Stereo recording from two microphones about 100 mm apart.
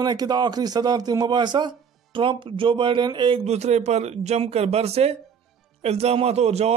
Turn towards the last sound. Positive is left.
turn(degrees=-90)